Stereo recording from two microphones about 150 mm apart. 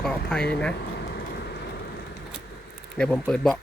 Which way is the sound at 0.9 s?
90° left.